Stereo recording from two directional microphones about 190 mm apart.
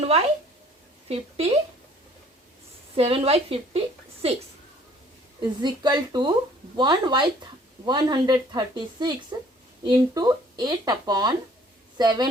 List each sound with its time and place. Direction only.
0.0 s a sound: 30° right (ahead or behind)
1.0 s speech: 30° right (ahead or behind)
2.9 s a woman's voice: 30° right (ahead or behind)
5.4 s speech: 20° right (ahead or behind)